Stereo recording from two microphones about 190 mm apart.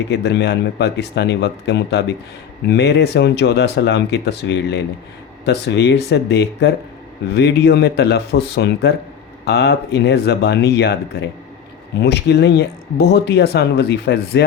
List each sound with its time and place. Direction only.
0.1 s speech: 60° left (ahead or behind)
11.9 s speech: 60° left (ahead or behind)